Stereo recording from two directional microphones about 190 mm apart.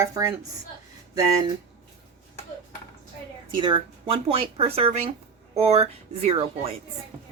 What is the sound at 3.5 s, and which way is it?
Speech, 25° right (ahead or behind).